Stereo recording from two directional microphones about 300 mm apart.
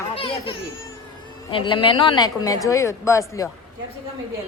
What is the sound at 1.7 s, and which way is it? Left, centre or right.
A woman's voice, centre.